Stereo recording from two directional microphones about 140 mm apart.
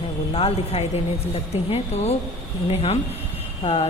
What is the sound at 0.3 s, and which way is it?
Speech, 45° left (ahead or behind).